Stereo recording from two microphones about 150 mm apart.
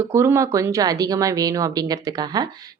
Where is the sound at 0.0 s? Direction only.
15° right (ahead or behind).